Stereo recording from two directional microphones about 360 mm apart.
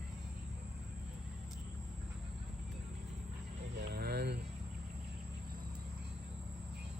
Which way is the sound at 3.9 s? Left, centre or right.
Right.